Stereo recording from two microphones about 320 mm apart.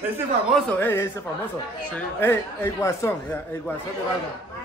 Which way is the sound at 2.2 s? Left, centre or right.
Centre.